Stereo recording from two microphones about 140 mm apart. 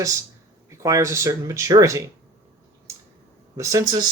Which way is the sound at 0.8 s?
20° right (ahead or behind).